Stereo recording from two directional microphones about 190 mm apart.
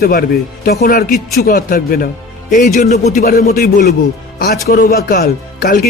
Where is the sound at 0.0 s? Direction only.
50° left (ahead or behind).